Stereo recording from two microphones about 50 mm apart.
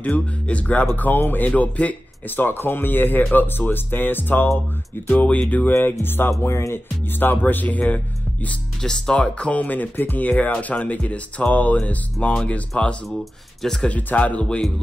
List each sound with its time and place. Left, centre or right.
0.0 s a man's voice: left
1.5 s a man's voice: left
5.7 s speech: left
6.4 s speech: left
7.1 s a man's voice: left
8.8 s speech: centre
13.2 s speech: centre
13.8 s speech: left